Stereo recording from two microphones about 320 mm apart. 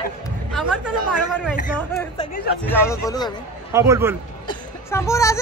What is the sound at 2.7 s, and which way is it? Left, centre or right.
Speech, centre.